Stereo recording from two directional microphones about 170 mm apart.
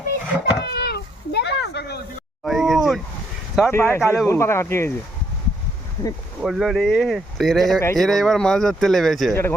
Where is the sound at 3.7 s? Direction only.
15° left (ahead or behind).